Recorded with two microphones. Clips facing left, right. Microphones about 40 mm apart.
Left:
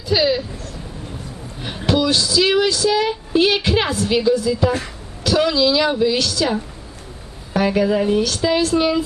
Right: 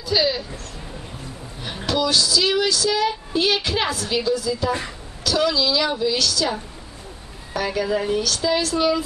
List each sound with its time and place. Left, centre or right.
0.1 s a sound: centre
1.9 s a woman's voice: left
6.1 s a woman's voice: left
7.5 s a woman's voice: left